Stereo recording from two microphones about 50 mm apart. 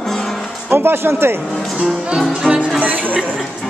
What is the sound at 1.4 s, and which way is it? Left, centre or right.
Speech, centre.